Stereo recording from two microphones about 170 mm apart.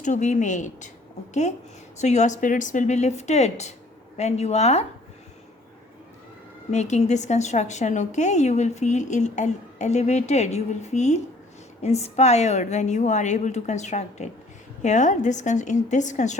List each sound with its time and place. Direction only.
0.0 s a woman's voice: 45° left (ahead or behind)
6.7 s a woman's voice: 45° left (ahead or behind)